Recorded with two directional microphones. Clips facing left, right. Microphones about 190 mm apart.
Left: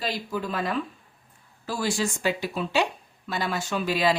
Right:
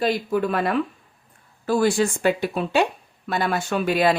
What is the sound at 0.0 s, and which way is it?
Speech, 55° right (ahead or behind).